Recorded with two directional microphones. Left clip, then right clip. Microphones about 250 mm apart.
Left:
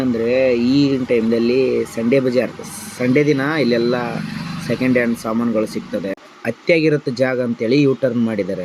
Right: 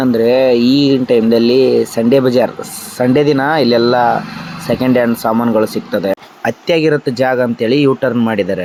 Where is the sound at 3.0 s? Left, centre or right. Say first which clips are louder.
Right 4 dB; right.